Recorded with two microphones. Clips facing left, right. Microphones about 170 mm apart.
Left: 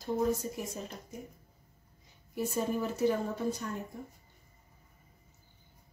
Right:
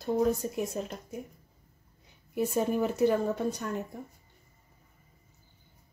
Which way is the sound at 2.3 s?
60° right (ahead or behind).